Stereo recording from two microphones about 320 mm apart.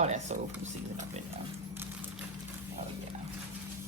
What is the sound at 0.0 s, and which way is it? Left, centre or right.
Speech, right.